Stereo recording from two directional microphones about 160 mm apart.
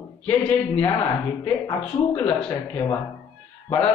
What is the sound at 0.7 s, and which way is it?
Speech, 20° left (ahead or behind).